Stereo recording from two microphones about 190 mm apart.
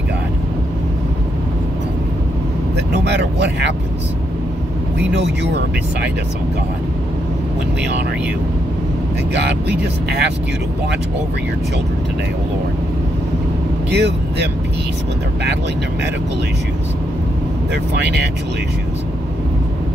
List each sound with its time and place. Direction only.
2.7 s vehicle: 60° right (ahead or behind)
9.3 s speech: 60° right (ahead or behind)
13.8 s speech: 65° right (ahead or behind)
17.9 s speech: 65° right (ahead or behind)